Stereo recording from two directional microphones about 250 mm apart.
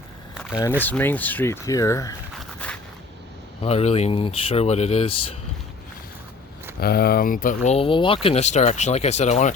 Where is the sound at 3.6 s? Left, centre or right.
Left.